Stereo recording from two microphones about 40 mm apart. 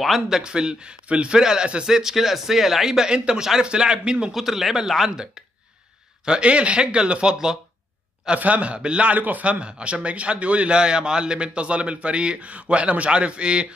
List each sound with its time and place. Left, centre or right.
0.3 s speech: centre
1.4 s a man's voice: centre
4.3 s a man's voice: centre
6.2 s speech: right
8.4 s a man's voice: right
8.7 s speech: right
9.1 s a man's voice: right
9.4 s speech: right